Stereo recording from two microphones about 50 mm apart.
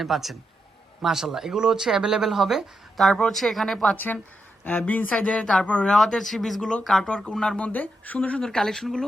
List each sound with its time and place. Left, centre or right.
0.0 s speech: centre
3.2 s speech: centre
3.9 s speech: left
5.9 s speech: centre
6.6 s speech: centre
6.8 s speech: centre
7.1 s speech: centre
7.6 s speech: left
8.4 s speech: centre